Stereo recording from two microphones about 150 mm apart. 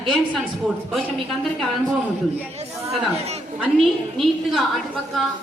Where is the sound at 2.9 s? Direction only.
45° right (ahead or behind).